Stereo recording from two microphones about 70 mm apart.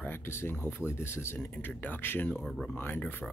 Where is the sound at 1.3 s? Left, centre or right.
Left.